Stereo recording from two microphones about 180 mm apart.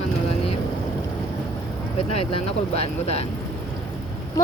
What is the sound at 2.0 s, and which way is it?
Speech, 30° left (ahead or behind).